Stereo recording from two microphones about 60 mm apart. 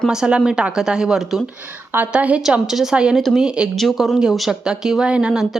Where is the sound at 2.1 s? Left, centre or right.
Right.